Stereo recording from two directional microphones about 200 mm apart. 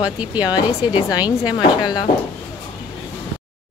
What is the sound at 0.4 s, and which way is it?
A woman's voice, 20° left (ahead or behind).